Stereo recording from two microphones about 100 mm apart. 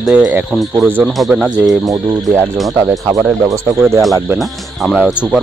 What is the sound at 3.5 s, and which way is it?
Speech, 30° right (ahead or behind).